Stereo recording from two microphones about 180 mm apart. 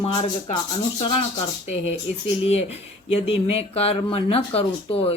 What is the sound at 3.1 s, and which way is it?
Speech, 35° left (ahead or behind).